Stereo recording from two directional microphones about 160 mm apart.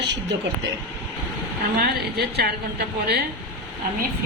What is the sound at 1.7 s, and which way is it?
A woman's voice, 90° right.